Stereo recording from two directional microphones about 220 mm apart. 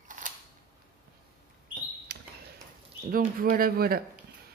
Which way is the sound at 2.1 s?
50° right (ahead or behind).